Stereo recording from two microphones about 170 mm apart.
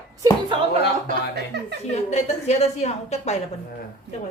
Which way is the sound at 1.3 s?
75° right (ahead or behind).